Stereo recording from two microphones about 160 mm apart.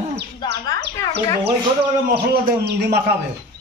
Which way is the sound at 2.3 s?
80° right.